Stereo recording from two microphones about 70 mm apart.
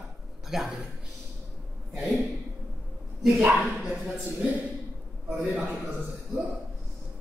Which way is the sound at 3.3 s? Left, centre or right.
Centre.